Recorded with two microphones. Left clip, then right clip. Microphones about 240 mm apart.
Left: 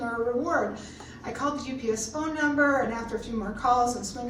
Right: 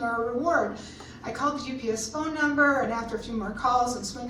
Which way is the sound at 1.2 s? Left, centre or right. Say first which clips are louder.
Right 2 dB; centre.